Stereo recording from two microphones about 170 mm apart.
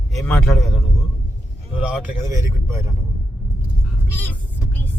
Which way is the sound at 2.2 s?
15° right (ahead or behind).